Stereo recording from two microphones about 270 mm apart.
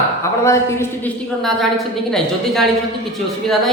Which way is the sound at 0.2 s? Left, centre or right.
Centre.